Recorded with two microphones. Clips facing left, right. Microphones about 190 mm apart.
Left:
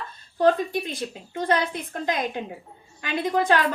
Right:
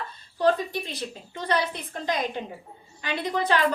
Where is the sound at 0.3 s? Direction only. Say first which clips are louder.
Left 3 dB; 50° left (ahead or behind).